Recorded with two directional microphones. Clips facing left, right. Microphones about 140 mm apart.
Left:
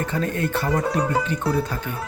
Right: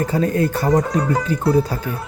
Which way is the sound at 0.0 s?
35° right (ahead or behind).